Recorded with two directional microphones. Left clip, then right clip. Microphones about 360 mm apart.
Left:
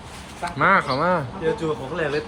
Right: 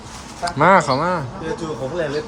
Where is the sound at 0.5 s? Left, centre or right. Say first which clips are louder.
Right 4 dB; centre.